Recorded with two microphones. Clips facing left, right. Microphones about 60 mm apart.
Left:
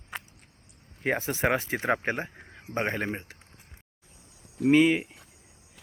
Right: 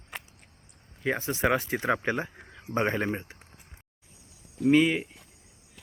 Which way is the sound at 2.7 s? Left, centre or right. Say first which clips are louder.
Right 2 dB; centre.